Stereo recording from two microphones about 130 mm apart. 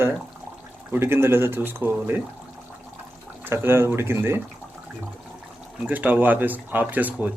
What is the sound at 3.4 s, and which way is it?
Speech, 20° right (ahead or behind).